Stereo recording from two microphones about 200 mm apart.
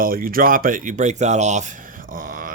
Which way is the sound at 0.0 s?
45° right (ahead or behind).